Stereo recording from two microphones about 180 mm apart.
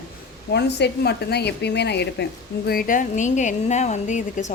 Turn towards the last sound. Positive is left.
turn(degrees=40)  # may be behind; listen again after turning